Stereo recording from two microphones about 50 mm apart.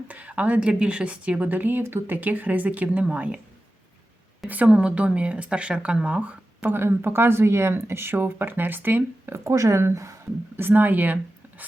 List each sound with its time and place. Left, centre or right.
0.1 s a woman's voice: right
4.4 s speech: right
6.7 s speech: right
9.3 s speech: right
10.6 s speech: right